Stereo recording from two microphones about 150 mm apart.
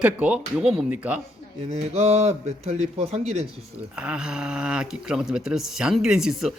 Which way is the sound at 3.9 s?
5° right (ahead or behind).